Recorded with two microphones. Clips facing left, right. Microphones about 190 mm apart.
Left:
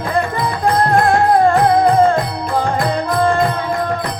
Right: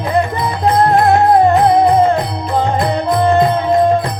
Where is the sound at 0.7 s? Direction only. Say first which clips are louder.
Right 3 dB; 20° right (ahead or behind).